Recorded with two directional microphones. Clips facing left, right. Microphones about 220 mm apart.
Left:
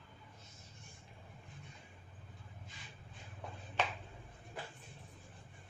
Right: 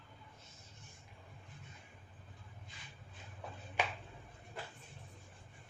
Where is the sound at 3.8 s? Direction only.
10° right (ahead or behind).